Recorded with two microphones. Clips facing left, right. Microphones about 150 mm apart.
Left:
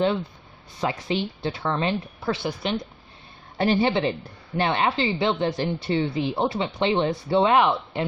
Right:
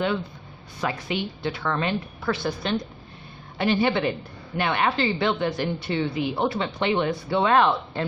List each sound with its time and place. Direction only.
0.8 s a woman's voice: 25° left (ahead or behind)
3.6 s a woman's voice: 35° left (ahead or behind); by 8.0 s 15° left (ahead or behind)